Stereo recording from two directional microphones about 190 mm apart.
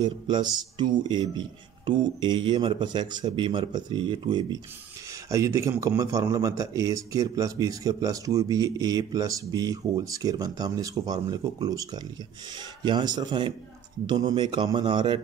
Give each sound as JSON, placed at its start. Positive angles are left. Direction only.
{"t": 0.0, "sound": "speech", "side_deg": -20}